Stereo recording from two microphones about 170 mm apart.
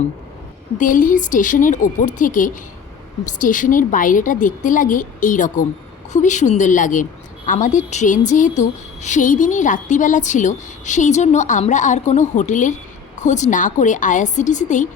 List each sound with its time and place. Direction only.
0.8 s a woman's voice: 50° left (ahead or behind)